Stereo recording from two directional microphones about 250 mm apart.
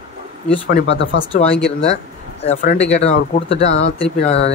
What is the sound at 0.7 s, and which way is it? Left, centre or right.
Speech, left.